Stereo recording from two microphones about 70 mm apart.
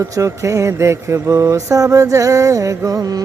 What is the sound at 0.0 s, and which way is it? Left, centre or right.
Music, right.